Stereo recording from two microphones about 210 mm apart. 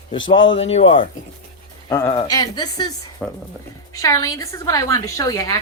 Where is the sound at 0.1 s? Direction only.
25° left (ahead or behind).